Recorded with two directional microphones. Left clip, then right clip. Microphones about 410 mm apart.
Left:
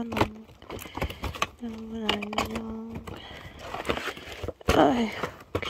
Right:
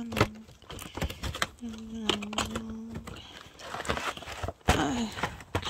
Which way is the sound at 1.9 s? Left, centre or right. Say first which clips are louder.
Left 3 dB; centre.